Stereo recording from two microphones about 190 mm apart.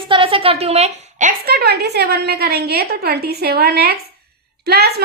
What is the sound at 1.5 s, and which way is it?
A child's voice, 55° right (ahead or behind).